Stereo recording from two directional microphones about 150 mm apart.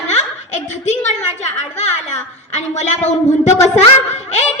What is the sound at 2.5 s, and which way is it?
A child's voice, 50° left (ahead or behind).